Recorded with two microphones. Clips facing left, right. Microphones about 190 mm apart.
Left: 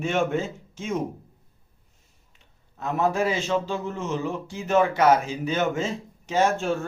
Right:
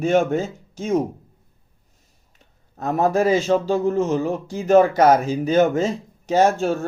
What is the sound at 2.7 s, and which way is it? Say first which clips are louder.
Speech: right 5 dB; 40° right (ahead or behind).